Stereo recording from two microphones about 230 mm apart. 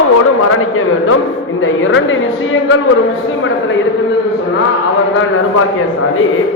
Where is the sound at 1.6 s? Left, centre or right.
Left.